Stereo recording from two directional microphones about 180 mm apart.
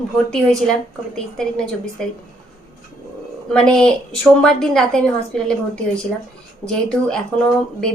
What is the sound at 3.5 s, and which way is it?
A woman's voice, 5° left (ahead or behind).